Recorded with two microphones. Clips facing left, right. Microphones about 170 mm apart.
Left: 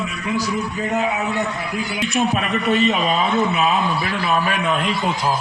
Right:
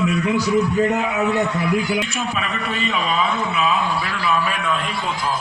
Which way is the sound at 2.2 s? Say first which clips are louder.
Left 5 dB; 45° left (ahead or behind).